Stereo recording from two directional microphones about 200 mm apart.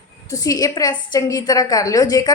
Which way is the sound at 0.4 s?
20° left (ahead or behind).